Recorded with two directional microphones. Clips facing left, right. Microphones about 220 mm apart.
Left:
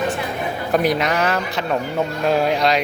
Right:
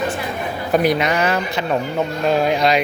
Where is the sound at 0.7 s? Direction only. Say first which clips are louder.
Right 2 dB; centre (ahead or behind).